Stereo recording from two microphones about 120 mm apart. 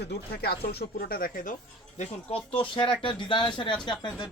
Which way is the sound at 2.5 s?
45° left (ahead or behind).